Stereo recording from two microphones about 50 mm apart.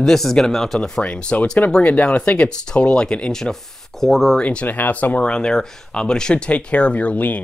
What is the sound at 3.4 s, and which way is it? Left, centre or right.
Speech, centre.